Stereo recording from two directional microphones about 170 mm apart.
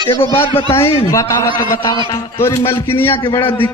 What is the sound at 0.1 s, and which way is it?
A man's voice, 15° left (ahead or behind).